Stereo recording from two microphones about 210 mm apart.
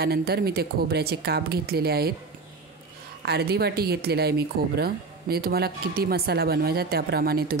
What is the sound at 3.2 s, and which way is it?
Speech, 50° right (ahead or behind).